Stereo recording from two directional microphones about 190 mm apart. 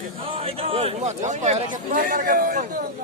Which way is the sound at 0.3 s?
30° right (ahead or behind).